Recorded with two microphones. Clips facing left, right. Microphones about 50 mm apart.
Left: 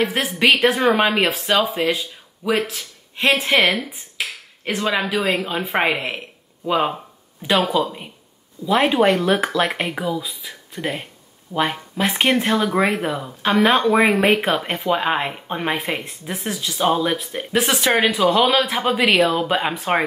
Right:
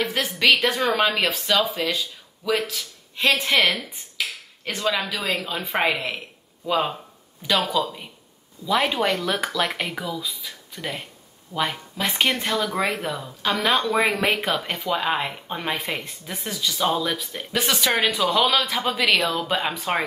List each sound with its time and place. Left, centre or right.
0.0 s speech: left